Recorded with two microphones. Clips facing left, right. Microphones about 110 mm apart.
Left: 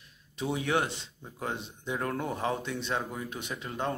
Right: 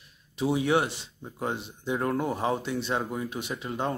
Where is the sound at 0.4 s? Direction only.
10° right (ahead or behind).